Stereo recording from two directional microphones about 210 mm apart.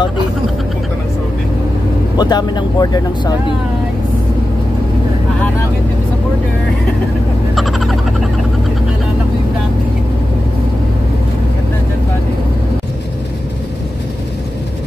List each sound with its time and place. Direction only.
2.1 s speech: 20° left (ahead or behind)
7.5 s frog: centre (ahead or behind)